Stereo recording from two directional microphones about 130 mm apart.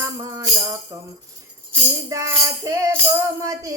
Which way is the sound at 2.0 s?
25° right (ahead or behind).